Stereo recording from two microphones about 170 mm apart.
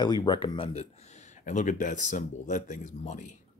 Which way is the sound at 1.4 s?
45° left (ahead or behind).